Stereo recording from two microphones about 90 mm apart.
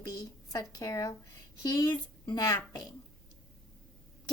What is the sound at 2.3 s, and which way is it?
Speech, 40° left (ahead or behind).